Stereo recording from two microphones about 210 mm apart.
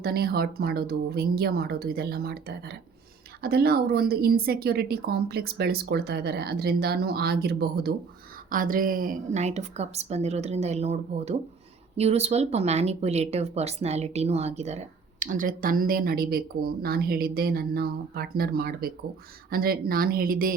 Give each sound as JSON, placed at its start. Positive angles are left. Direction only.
{"t": 0.0, "sound": "a woman's voice", "side_deg": -50}